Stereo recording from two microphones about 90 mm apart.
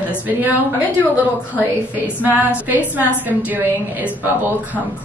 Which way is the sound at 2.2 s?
20° right (ahead or behind).